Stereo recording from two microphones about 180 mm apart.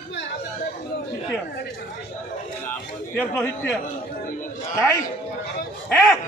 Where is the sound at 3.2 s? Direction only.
10° left (ahead or behind).